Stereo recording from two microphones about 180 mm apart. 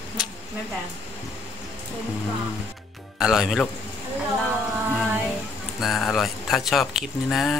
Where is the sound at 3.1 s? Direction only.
5° right (ahead or behind).